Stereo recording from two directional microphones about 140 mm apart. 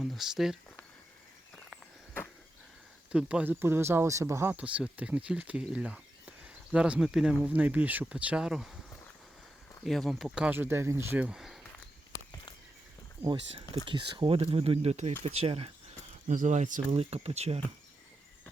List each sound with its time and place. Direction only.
0.0 s speech: centre (ahead or behind)
3.1 s speech: 5° right (ahead or behind)
9.8 s speech: centre (ahead or behind)
13.8 s speech: 35° right (ahead or behind)
16.3 s speech: 60° right (ahead or behind)
16.9 s speech: 45° right (ahead or behind)